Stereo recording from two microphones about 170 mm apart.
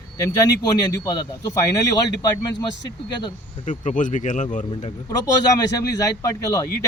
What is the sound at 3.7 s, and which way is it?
Speech, 50° left (ahead or behind).